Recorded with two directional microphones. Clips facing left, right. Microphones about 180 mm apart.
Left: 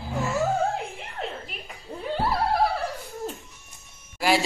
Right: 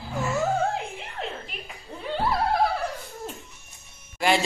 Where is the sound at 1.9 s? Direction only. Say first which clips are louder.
Left 3 dB; 5° left (ahead or behind).